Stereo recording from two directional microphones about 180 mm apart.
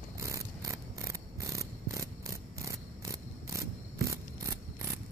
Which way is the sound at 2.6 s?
15° right (ahead or behind).